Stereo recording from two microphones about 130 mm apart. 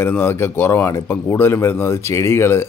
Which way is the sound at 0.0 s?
15° left (ahead or behind).